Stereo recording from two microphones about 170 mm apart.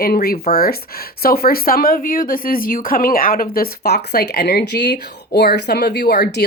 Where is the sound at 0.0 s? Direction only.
65° left (ahead or behind).